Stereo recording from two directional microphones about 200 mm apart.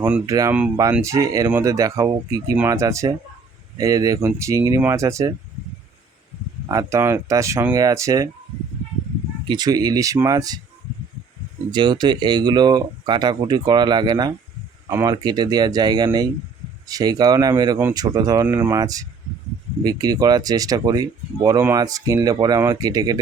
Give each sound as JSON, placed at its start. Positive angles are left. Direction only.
{"t": 0.0, "sound": "speech", "side_deg": -10}
{"t": 6.7, "sound": "speech", "side_deg": -15}
{"t": 9.5, "sound": "speech", "side_deg": -20}
{"t": 11.7, "sound": "speech", "side_deg": -20}